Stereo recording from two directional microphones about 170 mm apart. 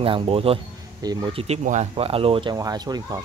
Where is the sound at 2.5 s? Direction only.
20° right (ahead or behind).